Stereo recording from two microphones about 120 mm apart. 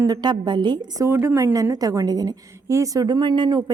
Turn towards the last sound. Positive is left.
turn(degrees=-35)  # may be behind; listen again after turning